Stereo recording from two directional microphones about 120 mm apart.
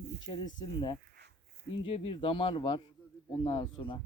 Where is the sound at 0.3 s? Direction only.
40° left (ahead or behind).